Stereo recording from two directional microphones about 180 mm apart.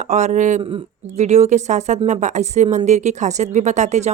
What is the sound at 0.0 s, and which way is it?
Speech, 40° right (ahead or behind).